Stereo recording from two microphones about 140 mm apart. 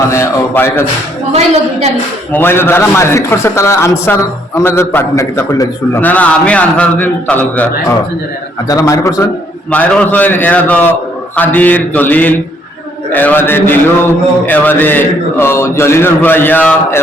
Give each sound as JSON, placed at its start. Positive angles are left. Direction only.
{"t": 0.1, "sound": "a man's voice", "side_deg": 20}
{"t": 2.3, "sound": "a man's voice", "side_deg": 15}
{"t": 8.6, "sound": "a man's voice", "side_deg": 25}
{"t": 9.7, "sound": "a man's voice", "side_deg": 10}